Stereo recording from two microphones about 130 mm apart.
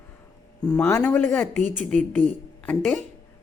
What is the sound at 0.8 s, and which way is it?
A woman's voice, 15° left (ahead or behind).